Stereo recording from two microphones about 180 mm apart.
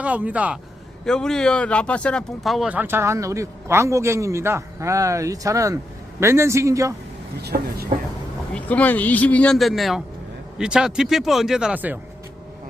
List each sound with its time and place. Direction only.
0.0 s speech: 10° right (ahead or behind)
1.0 s speech: 5° left (ahead or behind); by 6.9 s 15° right (ahead or behind)
7.4 s speech: 60° right (ahead or behind)
8.5 s speech: 10° left (ahead or behind); by 11.9 s 10° right (ahead or behind)